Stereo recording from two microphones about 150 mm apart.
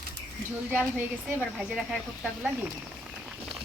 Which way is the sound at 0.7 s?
10° right (ahead or behind).